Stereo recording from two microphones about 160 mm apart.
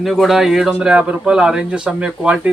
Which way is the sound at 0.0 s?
Centre (ahead or behind).